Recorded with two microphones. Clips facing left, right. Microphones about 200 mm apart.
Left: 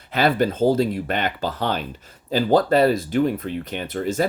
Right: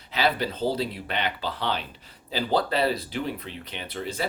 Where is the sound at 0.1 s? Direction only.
50° left (ahead or behind).